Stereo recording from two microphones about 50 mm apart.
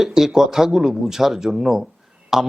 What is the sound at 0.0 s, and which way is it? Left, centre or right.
Speech, centre.